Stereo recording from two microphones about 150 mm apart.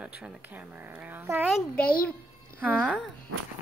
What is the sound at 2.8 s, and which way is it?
Child singing, centre (ahead or behind).